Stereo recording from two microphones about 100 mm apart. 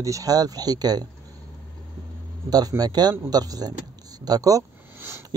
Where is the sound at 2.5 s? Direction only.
40° right (ahead or behind).